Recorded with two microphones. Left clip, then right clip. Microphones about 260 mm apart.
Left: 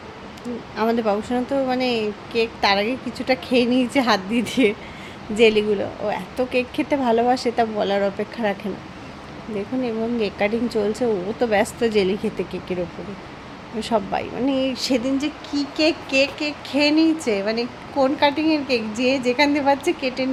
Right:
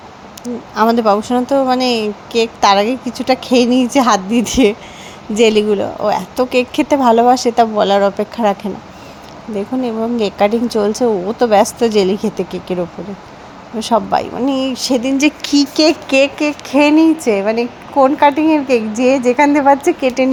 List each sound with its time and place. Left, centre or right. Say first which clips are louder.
0.8 s speech: right 9 dB; right
9.8 s a woman's voice: right 6 dB; right
19.4 s a woman's voice: right 8 dB; centre
20.0 s speech: right 10 dB; right